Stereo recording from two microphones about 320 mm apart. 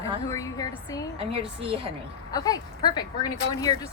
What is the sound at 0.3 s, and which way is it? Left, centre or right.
Speech, centre.